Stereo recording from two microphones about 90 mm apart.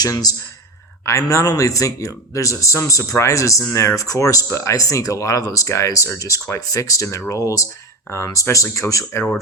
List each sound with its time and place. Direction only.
0.0 s a man's voice: 45° left (ahead or behind)